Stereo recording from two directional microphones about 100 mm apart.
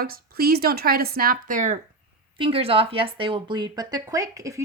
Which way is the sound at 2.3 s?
65° right (ahead or behind).